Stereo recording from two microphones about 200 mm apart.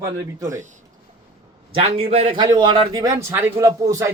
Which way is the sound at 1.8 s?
30° right (ahead or behind).